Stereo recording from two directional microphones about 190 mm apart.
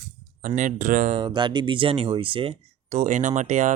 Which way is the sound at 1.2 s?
25° right (ahead or behind).